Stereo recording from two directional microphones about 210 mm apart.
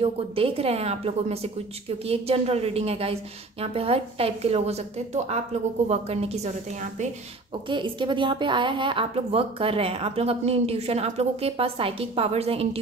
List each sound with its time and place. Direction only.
0.0 s a woman's voice: 25° right (ahead or behind)
7.6 s a woman's voice: 25° right (ahead or behind)